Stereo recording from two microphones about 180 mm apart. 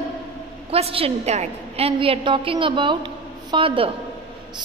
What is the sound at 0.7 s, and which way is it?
A woman's voice, 35° right (ahead or behind).